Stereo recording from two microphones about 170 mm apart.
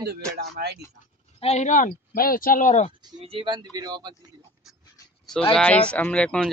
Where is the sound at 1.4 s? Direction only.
40° left (ahead or behind).